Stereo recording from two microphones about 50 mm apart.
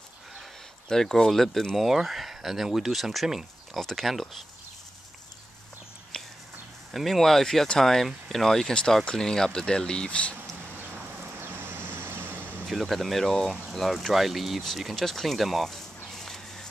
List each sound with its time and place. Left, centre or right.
0.8 s speech: centre
1.8 s speech: centre
6.1 s a sound: centre
6.9 s speech: centre; by 10.3 s left
11.4 s vehicle: right
12.6 s speech: centre
14.6 s a sound: centre